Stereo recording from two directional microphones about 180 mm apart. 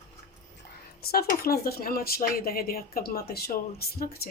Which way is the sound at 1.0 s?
60° left (ahead or behind).